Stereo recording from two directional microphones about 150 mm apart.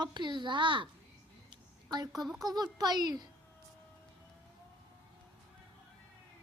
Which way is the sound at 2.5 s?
25° right (ahead or behind).